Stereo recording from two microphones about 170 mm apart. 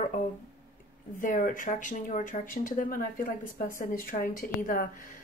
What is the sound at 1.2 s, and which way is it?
Speech, 50° left (ahead or behind).